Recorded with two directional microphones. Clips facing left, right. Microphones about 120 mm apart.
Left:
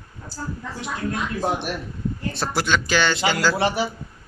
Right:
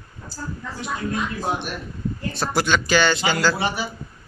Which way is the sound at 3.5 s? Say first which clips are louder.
Left 3 dB; 80° left.